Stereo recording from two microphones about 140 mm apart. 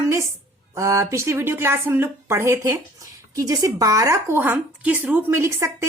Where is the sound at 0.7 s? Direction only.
20° right (ahead or behind).